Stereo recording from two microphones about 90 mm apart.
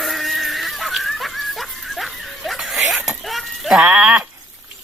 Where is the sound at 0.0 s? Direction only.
Centre (ahead or behind).